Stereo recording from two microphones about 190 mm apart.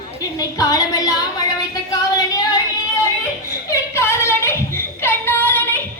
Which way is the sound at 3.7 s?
15° left (ahead or behind).